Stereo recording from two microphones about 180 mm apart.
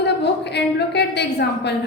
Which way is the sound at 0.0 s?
70° left (ahead or behind).